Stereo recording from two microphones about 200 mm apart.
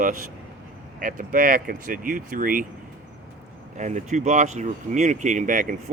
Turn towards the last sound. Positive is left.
turn(degrees=-40)  # may be behind; listen again after turning